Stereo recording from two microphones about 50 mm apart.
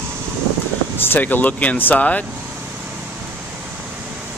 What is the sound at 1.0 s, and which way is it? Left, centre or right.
Speech, left.